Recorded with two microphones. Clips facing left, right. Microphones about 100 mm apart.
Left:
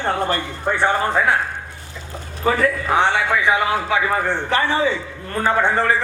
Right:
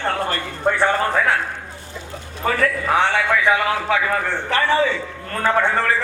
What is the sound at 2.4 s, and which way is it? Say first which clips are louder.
A man's voice: left 1 dB; 20° left (ahead or behind).